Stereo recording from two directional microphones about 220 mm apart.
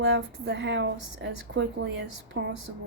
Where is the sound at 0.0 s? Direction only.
50° right (ahead or behind).